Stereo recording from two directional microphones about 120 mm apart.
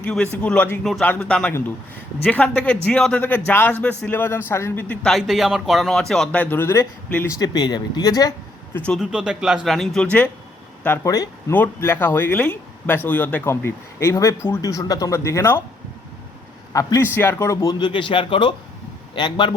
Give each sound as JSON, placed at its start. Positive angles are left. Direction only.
{"t": 0.0, "sound": "a man's voice", "side_deg": 10}
{"t": 5.1, "sound": "speech", "side_deg": 0}
{"t": 7.3, "sound": "speech", "side_deg": 35}
{"t": 9.0, "sound": "speech", "side_deg": -5}
{"t": 11.0, "sound": "speech", "side_deg": 30}
{"t": 16.7, "sound": "speech", "side_deg": 30}